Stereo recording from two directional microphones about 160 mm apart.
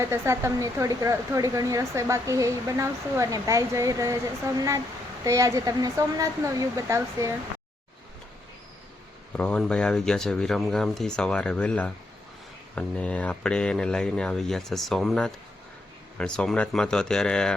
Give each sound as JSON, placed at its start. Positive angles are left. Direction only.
{"t": 0.0, "sound": "speech", "side_deg": -15}
{"t": 9.3, "sound": "speech", "side_deg": 5}